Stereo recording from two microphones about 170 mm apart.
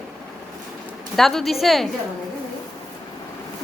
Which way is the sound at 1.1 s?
Centre (ahead or behind).